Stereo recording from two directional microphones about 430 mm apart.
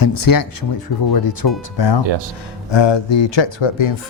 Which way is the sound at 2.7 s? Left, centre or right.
Left.